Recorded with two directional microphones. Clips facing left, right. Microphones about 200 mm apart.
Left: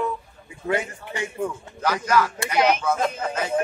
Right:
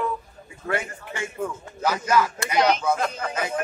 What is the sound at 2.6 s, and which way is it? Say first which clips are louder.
Music: left 1 dB; 5° left (ahead or behind).